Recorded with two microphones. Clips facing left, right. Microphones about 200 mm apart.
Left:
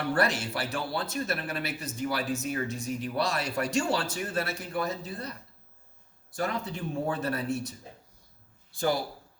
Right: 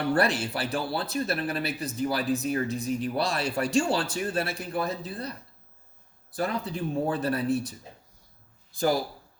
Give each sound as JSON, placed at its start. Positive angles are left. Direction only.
{"t": 0.1, "sound": "speech", "side_deg": -35}
{"t": 6.3, "sound": "speech", "side_deg": -35}